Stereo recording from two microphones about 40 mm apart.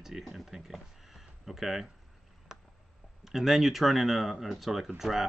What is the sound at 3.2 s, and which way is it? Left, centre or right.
Speech, centre.